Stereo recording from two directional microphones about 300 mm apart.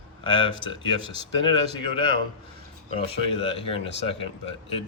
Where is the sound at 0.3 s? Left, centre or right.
Centre.